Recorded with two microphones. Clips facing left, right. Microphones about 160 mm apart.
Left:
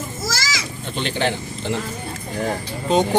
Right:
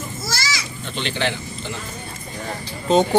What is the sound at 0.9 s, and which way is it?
Speech, 45° left (ahead or behind).